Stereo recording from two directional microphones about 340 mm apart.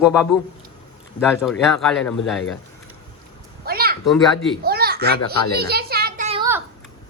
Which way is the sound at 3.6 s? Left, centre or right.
Right.